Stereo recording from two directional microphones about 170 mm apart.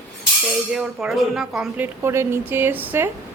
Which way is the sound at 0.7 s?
Centre (ahead or behind).